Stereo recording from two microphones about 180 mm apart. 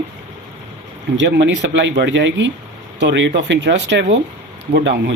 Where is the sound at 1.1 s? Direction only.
85° right.